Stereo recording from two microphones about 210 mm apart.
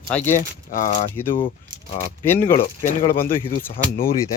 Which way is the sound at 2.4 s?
40° left (ahead or behind).